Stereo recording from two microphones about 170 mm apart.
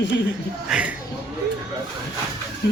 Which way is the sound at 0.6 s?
5° right (ahead or behind).